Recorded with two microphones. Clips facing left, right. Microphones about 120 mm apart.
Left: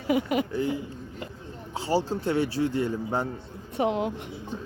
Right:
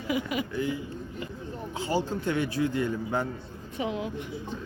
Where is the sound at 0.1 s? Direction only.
45° left (ahead or behind).